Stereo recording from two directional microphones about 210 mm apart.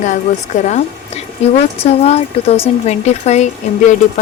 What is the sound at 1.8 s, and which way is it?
Speech, 30° left (ahead or behind).